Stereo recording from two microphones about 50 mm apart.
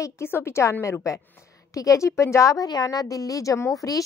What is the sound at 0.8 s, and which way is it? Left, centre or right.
A woman's voice, left.